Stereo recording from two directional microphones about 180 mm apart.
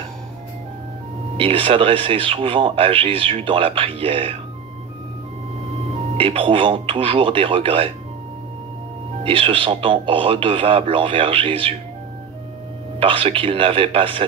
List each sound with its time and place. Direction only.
1.3 s speech: 30° right (ahead or behind)
6.1 s speech: 30° right (ahead or behind)
9.2 s speech: 30° right (ahead or behind)
13.0 s speech: 30° right (ahead or behind)